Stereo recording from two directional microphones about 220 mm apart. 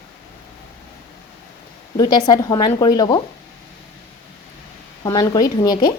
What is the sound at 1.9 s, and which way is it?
A woman's voice, 20° left (ahead or behind).